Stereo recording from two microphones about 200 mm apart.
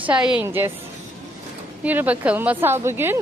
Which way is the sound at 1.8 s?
10° right (ahead or behind).